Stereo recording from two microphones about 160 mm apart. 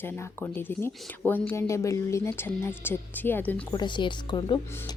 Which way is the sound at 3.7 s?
30° left (ahead or behind).